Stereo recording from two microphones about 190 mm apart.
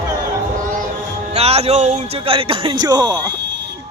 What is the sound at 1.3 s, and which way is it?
A man's voice, 35° right (ahead or behind).